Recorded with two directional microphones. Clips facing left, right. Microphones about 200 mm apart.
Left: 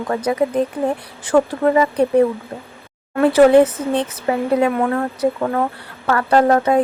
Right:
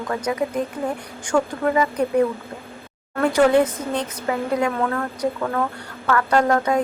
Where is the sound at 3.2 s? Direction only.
30° left (ahead or behind).